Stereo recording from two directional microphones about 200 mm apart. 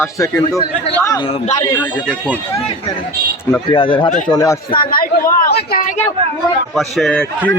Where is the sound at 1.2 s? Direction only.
30° left (ahead or behind).